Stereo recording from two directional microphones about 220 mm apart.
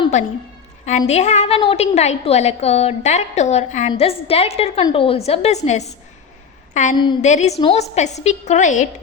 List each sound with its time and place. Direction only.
0.0 s a sound: 30° left (ahead or behind)
0.9 s a woman's voice: 30° left (ahead or behind)
6.9 s a woman's voice: 20° left (ahead or behind)
7.3 s a woman's voice: 30° left (ahead or behind)